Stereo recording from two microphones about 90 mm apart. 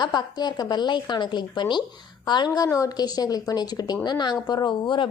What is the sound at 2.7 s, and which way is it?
A woman's voice, 45° left (ahead or behind).